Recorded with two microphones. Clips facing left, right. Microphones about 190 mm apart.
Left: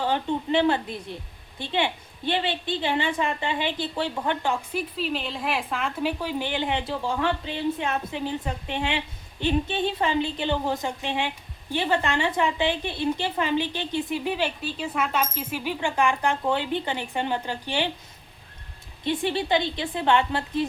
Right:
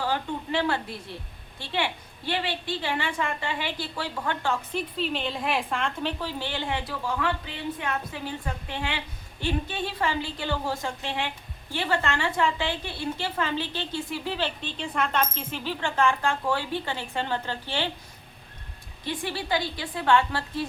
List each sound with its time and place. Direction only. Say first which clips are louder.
0.0 s a woman's voice: left 4 dB; 20° left (ahead or behind)
19.0 s a woman's voice: left 6 dB; 20° left (ahead or behind)